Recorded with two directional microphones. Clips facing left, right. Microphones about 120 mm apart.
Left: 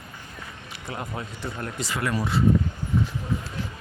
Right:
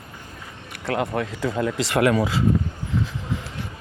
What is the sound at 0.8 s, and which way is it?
Speech, 80° right.